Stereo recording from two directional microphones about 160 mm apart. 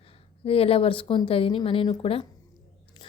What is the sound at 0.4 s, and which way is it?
A woman's voice, 35° left (ahead or behind).